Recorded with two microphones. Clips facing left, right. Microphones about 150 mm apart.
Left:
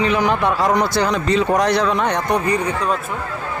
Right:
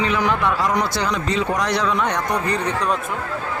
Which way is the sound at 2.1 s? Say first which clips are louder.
Left 3 dB; 25° left (ahead or behind).